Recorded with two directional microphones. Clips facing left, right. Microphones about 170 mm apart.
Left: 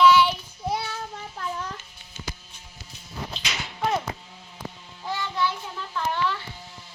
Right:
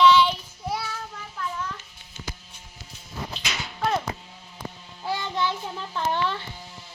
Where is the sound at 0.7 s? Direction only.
25° left (ahead or behind).